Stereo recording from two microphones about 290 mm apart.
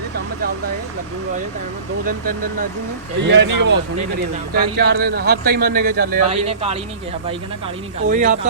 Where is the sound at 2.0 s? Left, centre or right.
Right.